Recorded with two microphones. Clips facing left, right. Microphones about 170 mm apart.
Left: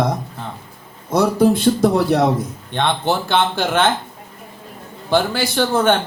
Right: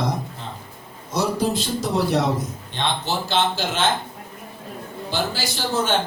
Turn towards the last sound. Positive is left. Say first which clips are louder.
# left 7 dB
turn(degrees=55)  # may be behind; listen again after turning